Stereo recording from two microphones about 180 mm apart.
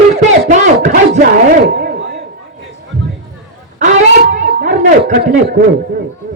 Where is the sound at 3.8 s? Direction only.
45° right (ahead or behind).